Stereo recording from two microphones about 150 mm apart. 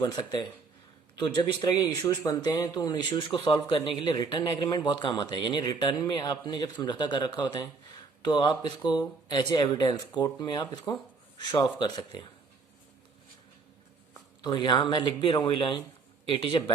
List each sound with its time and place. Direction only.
0.0 s speech: 25° left (ahead or behind)
14.1 s speech: 30° left (ahead or behind)